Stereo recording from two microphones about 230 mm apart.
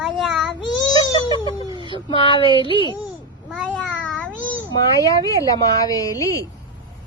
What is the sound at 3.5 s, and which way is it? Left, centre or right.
Speech, centre.